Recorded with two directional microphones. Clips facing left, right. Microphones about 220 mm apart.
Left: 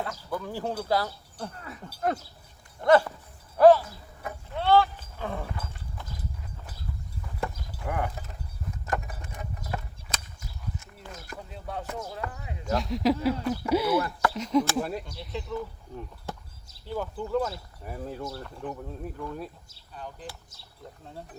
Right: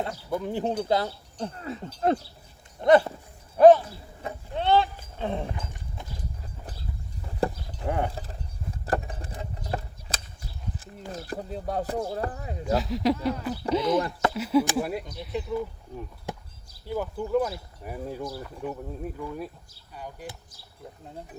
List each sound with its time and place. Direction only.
0.0 s speech: 25° right (ahead or behind)
3.6 s a sound: 20° right (ahead or behind)
5.1 s livestock: 25° right (ahead or behind)
5.5 s clip-clop: 15° right (ahead or behind)
7.4 s clip-clop: 35° right (ahead or behind)
8.9 s a sound: 30° right (ahead or behind)
11.1 s speech: 35° right (ahead or behind)
12.7 s speech: centre (ahead or behind)
14.0 s speech: 25° right (ahead or behind)
14.3 s speech: 5° right (ahead or behind)
16.3 s a sound: 15° right (ahead or behind)
16.8 s speech: 15° right (ahead or behind)